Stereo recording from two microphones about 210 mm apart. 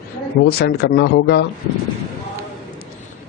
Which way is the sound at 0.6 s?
50° left (ahead or behind).